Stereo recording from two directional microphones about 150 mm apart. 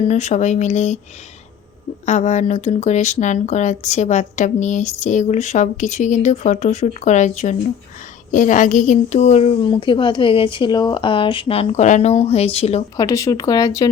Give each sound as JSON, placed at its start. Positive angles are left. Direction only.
{"t": 0.1, "sound": "speech", "side_deg": 50}
{"t": 2.0, "sound": "a woman's voice", "side_deg": 50}
{"t": 13.0, "sound": "speech", "side_deg": 20}